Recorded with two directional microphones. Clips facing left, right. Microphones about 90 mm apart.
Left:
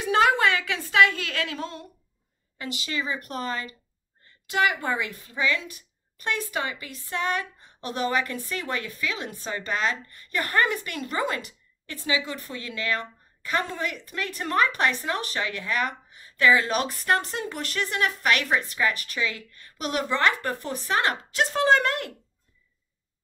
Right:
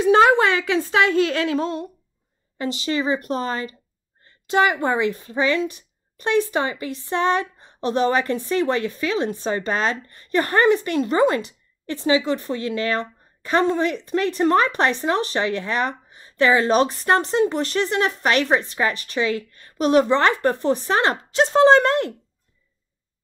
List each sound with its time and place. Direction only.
0.0 s a woman's voice: 30° right (ahead or behind)